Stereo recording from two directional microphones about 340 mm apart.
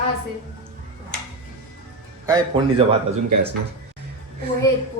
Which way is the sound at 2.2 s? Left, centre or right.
Centre.